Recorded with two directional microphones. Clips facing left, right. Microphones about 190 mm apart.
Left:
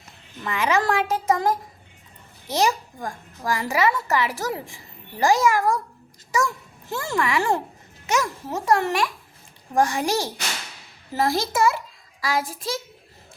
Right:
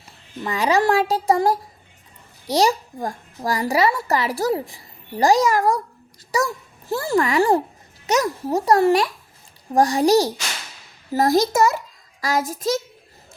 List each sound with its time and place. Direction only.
0.4 s a child's voice: 35° right (ahead or behind)